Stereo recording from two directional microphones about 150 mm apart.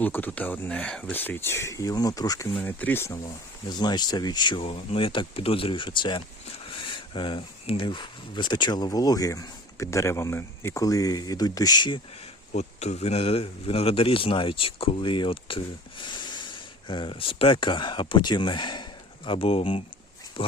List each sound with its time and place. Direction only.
0.0 s speech: 10° left (ahead or behind)
2.6 s speech: 10° left (ahead or behind)
3.7 s speech: 30° left (ahead or behind)
12.5 s speech: 50° left (ahead or behind)